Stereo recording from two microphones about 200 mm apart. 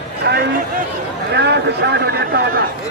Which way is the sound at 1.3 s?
55° right (ahead or behind).